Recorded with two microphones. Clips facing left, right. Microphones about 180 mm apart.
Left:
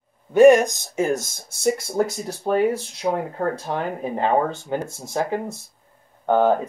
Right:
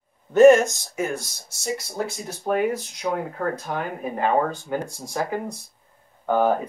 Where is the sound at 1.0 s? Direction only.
45° left (ahead or behind).